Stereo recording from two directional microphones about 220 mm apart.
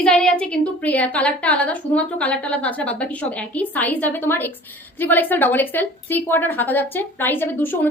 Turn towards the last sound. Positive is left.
turn(degrees=10)  # may be behind; listen again after turning